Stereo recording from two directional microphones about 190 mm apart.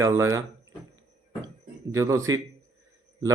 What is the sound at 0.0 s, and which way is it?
Speech, 15° right (ahead or behind).